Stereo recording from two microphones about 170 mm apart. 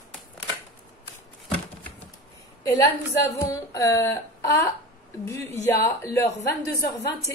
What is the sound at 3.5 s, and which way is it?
A woman's voice, 20° left (ahead or behind).